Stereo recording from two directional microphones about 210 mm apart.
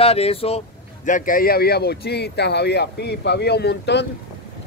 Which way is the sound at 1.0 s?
40° left (ahead or behind).